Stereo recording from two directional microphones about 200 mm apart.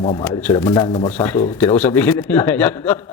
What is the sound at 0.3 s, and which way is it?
Speech, 10° left (ahead or behind).